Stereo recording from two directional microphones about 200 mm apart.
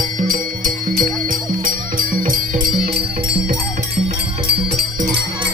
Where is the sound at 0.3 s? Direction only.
45° right (ahead or behind).